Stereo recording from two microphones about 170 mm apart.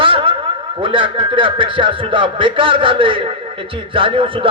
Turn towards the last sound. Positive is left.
turn(degrees=-30)  # may be behind; listen again after turning